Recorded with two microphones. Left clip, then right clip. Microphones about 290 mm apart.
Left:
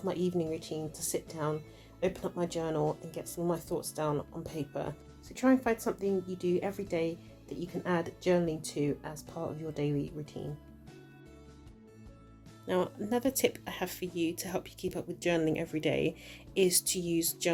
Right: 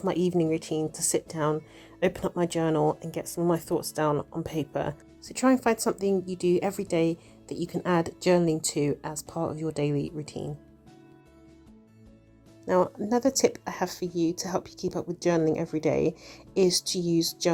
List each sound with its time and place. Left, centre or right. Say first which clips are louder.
0.0 s speech: right 7 dB; right
12.6 s speech: right 8 dB; centre
14.8 s speech: right 6 dB; centre
15.2 s speech: right 5 dB; centre